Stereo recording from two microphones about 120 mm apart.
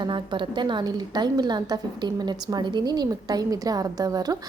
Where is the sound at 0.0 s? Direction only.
40° right (ahead or behind).